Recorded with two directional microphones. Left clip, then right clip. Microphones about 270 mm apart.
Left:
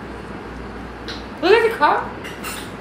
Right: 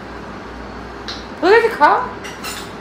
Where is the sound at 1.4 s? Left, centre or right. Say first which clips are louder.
Right 3 dB; centre.